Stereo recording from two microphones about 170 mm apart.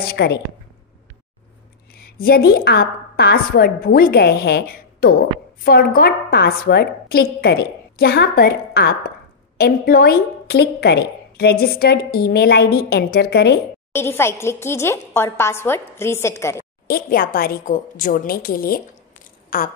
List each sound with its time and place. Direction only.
0.0 s a sound: 70° left (ahead or behind)
2.1 s a woman's voice: 60° left (ahead or behind)
13.9 s a woman's voice: 15° left (ahead or behind)
16.8 s a woman's voice: 60° left (ahead or behind)